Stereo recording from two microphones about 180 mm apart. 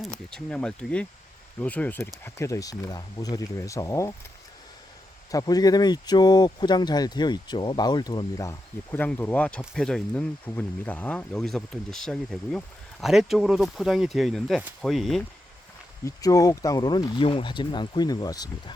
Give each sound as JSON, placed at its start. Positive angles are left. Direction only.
{"t": 0.0, "sound": "speech", "side_deg": 5}
{"t": 5.3, "sound": "speech", "side_deg": 20}
{"t": 16.0, "sound": "speech", "side_deg": 20}